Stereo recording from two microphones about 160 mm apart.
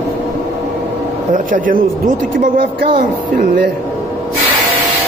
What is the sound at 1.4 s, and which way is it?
Speech, 55° right (ahead or behind).